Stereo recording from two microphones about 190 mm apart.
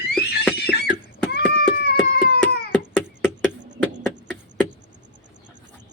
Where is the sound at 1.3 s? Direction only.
55° left (ahead or behind).